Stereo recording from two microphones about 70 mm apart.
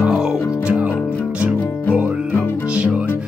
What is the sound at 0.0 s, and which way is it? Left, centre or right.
Music, centre.